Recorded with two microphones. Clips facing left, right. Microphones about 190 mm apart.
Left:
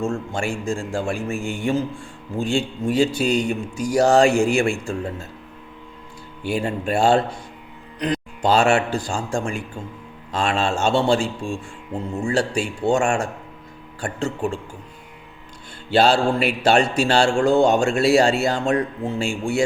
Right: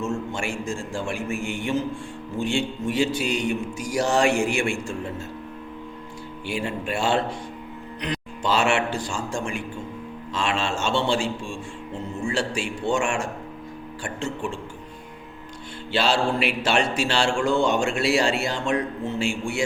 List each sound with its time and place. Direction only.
0.3 s mantra: 35° left (ahead or behind)
6.4 s mantra: 40° left (ahead or behind)
15.9 s mantra: 40° left (ahead or behind)